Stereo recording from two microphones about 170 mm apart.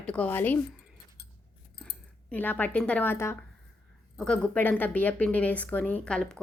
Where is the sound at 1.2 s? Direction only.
75° left (ahead or behind).